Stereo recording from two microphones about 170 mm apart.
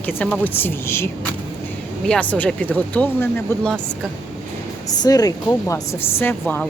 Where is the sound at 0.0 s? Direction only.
10° left (ahead or behind).